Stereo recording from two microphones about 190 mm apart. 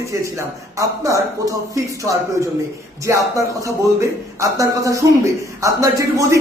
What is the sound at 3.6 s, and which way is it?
A man's voice, 15° right (ahead or behind).